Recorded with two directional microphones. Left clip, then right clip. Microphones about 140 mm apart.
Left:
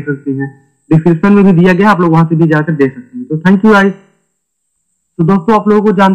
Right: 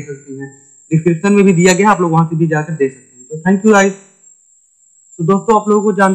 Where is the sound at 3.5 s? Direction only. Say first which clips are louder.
Left 2 dB; 40° right (ahead or behind).